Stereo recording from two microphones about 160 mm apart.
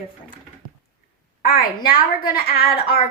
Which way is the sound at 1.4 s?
65° left (ahead or behind).